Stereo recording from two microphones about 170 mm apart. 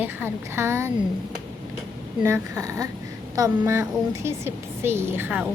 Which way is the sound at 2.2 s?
15° right (ahead or behind).